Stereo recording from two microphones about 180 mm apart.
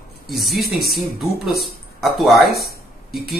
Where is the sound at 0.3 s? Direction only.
Centre (ahead or behind).